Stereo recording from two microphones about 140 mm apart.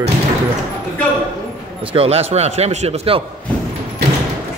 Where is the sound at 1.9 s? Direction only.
45° right (ahead or behind).